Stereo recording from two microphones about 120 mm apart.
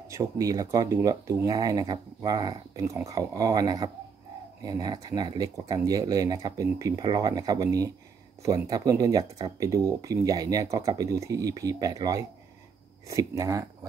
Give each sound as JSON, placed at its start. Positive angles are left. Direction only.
{"t": 0.1, "sound": "speech", "side_deg": -25}